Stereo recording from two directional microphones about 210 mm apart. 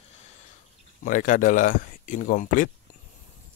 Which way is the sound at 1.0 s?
40° left (ahead or behind).